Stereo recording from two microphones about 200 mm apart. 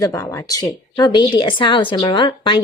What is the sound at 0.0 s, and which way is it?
A woman's voice, 15° left (ahead or behind).